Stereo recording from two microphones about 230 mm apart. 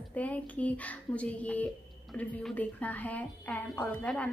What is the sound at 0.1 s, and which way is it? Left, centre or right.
A woman's voice, centre.